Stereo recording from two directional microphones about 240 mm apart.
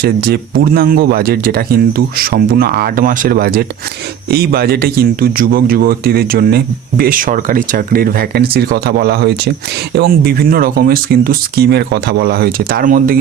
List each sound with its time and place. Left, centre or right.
0.0 s speech: right